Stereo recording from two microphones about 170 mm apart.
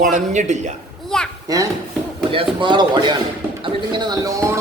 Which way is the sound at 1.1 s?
5° left (ahead or behind).